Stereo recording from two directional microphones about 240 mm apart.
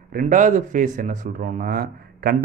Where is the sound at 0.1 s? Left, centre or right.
Right.